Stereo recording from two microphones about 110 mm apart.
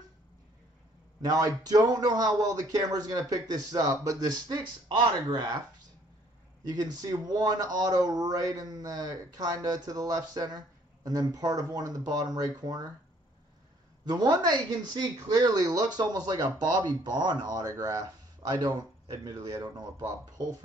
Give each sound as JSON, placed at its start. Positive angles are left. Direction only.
{"t": 1.2, "sound": "speech", "side_deg": -35}
{"t": 6.7, "sound": "speech", "side_deg": -35}
{"t": 14.0, "sound": "speech", "side_deg": -35}